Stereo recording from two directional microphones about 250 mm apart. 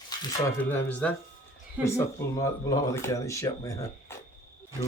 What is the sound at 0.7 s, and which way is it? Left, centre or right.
Speech, centre.